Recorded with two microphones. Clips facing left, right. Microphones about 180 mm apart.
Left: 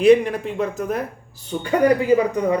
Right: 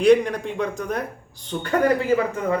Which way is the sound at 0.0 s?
5° left (ahead or behind).